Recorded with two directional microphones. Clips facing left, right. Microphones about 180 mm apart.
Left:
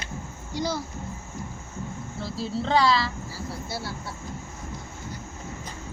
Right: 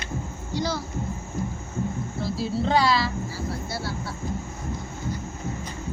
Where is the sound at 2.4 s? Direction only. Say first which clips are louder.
Even; 5° right (ahead or behind).